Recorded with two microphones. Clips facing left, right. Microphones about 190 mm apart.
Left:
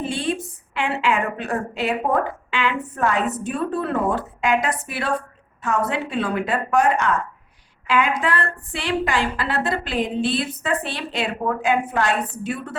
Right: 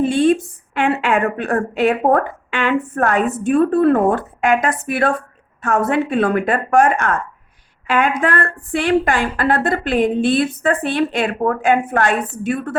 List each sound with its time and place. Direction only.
0.0 s a woman's voice: 50° right (ahead or behind)